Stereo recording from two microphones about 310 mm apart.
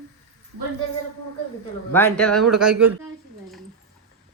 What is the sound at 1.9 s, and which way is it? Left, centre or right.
Speech, centre.